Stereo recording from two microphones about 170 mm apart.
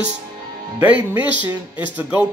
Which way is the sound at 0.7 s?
10° right (ahead or behind).